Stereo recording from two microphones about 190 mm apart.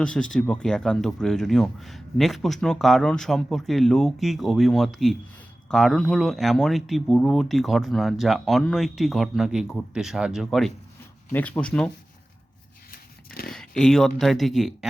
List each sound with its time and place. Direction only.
0.0 s speech: 5° left (ahead or behind)
11.3 s speech: 10° left (ahead or behind)
12.9 s a sound: 50° left (ahead or behind)
13.5 s speech: 5° left (ahead or behind)